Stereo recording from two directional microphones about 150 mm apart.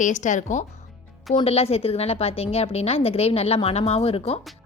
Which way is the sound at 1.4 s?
40° left (ahead or behind).